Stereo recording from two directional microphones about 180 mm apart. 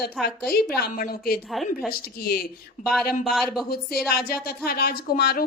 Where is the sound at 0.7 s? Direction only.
60° left (ahead or behind).